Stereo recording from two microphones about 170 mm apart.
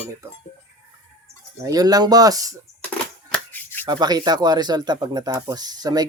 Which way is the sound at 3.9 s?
25° right (ahead or behind).